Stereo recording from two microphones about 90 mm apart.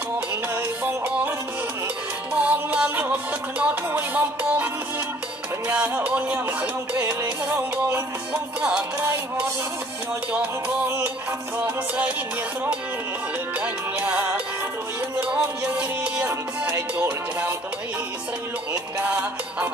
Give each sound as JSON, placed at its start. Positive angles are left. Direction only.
{"t": 0.6, "sound": "music", "side_deg": -20}
{"t": 2.3, "sound": "music", "side_deg": -15}
{"t": 5.7, "sound": "music", "side_deg": -15}
{"t": 11.5, "sound": "music", "side_deg": -20}
{"t": 13.6, "sound": "music", "side_deg": -15}
{"t": 16.3, "sound": "music", "side_deg": -25}
{"t": 18.7, "sound": "music", "side_deg": -15}